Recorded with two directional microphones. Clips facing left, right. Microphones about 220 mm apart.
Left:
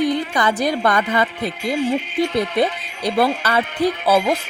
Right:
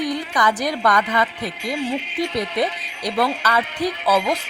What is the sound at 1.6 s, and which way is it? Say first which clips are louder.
Speech: left 4 dB; 50° left (ahead or behind).